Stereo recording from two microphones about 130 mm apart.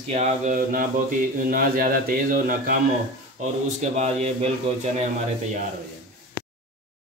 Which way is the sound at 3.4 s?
60° right (ahead or behind).